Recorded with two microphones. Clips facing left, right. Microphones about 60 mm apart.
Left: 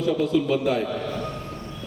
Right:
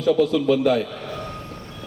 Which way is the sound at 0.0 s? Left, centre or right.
Right.